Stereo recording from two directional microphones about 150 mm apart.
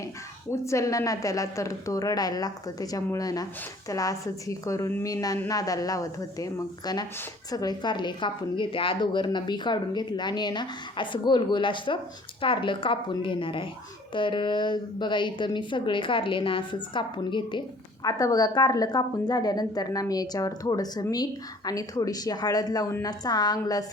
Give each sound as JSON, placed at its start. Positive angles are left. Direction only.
{"t": 0.5, "sound": "a woman's voice", "side_deg": 20}